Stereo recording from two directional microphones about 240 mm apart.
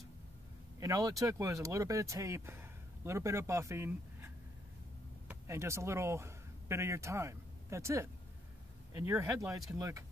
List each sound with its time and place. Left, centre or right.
0.7 s speech: centre
5.3 s speech: centre